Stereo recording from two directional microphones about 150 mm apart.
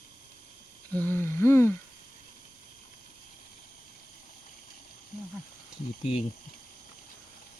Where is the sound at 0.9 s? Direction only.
10° left (ahead or behind).